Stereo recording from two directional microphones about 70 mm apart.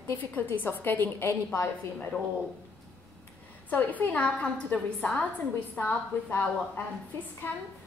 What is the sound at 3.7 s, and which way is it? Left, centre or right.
Speech, left.